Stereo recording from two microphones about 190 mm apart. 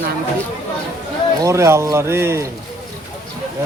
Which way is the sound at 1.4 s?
15° right (ahead or behind).